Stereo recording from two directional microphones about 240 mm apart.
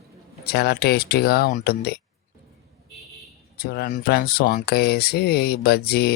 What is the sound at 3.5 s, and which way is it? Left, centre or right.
Speech, left.